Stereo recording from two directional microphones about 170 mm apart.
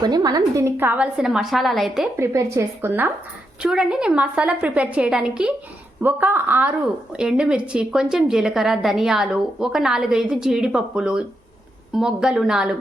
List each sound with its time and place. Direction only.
0.0 s a woman's voice: 25° right (ahead or behind); by 2.0 s centre (ahead or behind)
2.1 s a woman's voice: 15° right (ahead or behind)